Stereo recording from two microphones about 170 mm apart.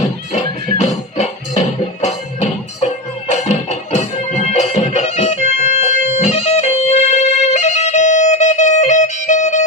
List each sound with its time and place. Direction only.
0.3 s music: 40° left (ahead or behind)